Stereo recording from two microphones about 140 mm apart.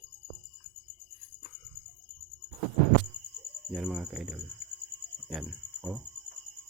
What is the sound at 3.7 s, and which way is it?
Speech, 5° right (ahead or behind).